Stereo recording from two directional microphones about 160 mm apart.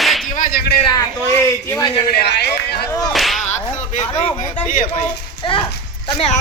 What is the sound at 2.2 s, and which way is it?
Speech, 90° left.